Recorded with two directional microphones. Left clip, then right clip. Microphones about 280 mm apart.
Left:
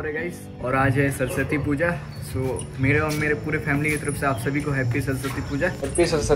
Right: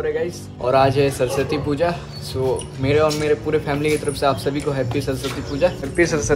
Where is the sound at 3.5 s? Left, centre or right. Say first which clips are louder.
Right 4 dB; centre.